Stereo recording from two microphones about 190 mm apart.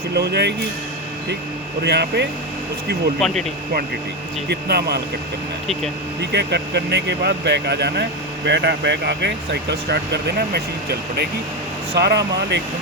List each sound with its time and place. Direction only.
0.1 s speech: 60° right (ahead or behind)
1.8 s speech: 60° right (ahead or behind)
3.2 s speech: centre (ahead or behind)
4.4 s speech: 60° right (ahead or behind)
6.1 s speech: 60° right (ahead or behind)
11.9 s speech: 60° right (ahead or behind)